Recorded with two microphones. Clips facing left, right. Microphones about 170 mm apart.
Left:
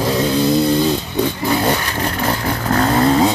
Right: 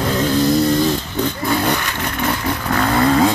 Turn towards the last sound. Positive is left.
turn(degrees=20)  # may be behind; listen again after turning